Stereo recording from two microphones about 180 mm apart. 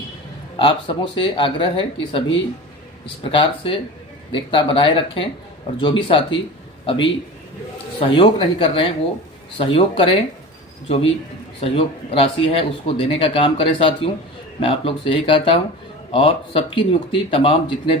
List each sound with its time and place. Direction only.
0.6 s speech: 25° left (ahead or behind)